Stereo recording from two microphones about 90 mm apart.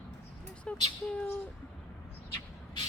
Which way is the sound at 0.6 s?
15° left (ahead or behind).